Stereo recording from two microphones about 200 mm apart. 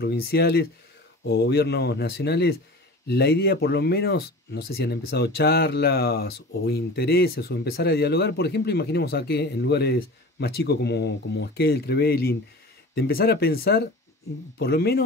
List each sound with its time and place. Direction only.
0.0 s speech: 50° left (ahead or behind)